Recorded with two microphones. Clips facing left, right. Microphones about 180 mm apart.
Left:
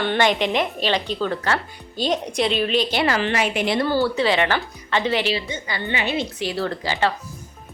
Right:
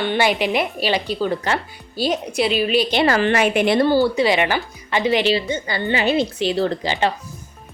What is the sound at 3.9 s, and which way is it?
A woman's voice, 15° right (ahead or behind).